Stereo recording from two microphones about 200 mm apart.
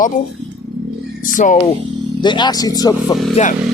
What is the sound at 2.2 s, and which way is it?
Speech, 20° left (ahead or behind).